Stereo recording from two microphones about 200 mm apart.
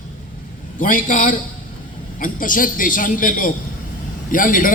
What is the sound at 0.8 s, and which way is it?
A man's voice, 40° left (ahead or behind).